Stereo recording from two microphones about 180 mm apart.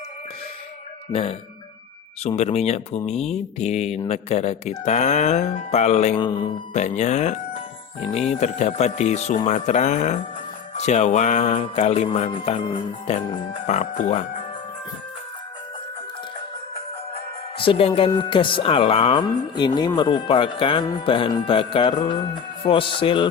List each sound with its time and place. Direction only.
1.1 s speech: 35° left (ahead or behind)
6.7 s speech: 40° left (ahead or behind)
13.7 s speech: 40° left (ahead or behind)
17.6 s speech: 30° left (ahead or behind)